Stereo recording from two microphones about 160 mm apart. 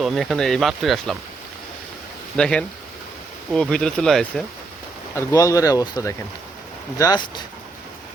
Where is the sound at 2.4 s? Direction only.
5° left (ahead or behind).